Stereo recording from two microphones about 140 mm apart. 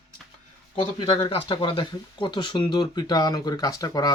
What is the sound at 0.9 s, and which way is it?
Speech, 35° left (ahead or behind).